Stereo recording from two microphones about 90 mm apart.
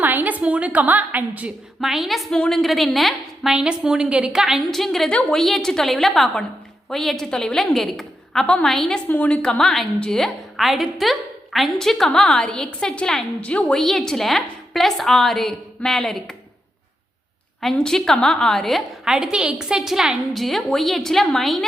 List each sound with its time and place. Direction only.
0.0 s a woman's voice: 20° right (ahead or behind)
1.8 s a woman's voice: centre (ahead or behind)
9.0 s a woman's voice: 15° left (ahead or behind)
17.6 s a woman's voice: 5° left (ahead or behind)